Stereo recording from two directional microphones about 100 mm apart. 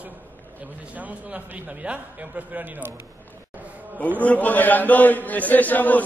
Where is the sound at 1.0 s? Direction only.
15° right (ahead or behind).